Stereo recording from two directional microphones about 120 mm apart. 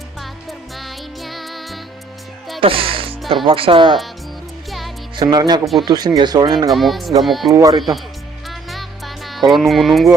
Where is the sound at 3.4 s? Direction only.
50° right (ahead or behind).